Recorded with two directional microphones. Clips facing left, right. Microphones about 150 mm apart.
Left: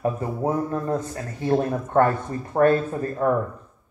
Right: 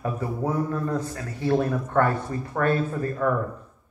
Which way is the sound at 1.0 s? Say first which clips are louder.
Even; 45° left (ahead or behind).